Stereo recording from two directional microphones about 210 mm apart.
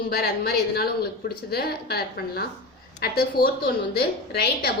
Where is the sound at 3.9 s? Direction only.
50° left (ahead or behind).